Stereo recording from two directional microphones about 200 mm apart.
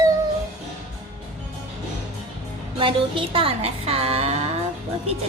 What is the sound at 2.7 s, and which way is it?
Speech, 25° right (ahead or behind).